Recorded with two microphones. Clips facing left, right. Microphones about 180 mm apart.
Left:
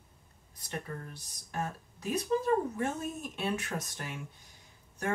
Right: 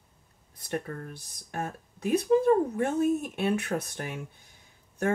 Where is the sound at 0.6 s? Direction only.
55° right (ahead or behind).